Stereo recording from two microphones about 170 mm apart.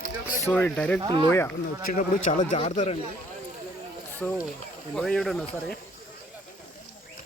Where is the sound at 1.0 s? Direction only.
25° right (ahead or behind).